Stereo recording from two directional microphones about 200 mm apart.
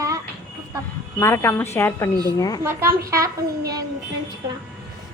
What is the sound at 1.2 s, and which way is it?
A woman's voice, 10° left (ahead or behind).